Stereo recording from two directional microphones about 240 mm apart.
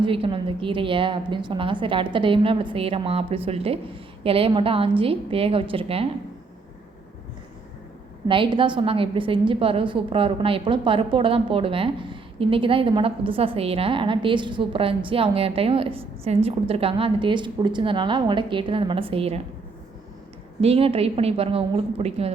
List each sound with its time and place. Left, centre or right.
0.0 s a woman's voice: right
8.3 s a woman's voice: right
20.6 s a woman's voice: right